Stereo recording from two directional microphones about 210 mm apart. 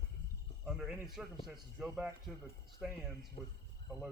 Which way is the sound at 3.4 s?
30° left (ahead or behind).